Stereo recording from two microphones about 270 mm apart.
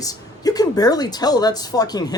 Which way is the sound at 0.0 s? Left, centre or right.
Centre.